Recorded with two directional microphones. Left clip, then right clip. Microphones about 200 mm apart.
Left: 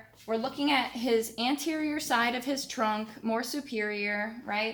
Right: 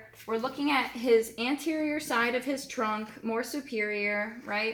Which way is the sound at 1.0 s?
15° left (ahead or behind).